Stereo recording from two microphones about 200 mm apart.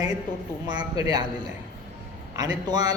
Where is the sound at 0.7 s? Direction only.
20° right (ahead or behind).